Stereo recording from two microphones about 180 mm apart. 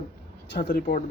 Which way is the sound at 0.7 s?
50° left (ahead or behind).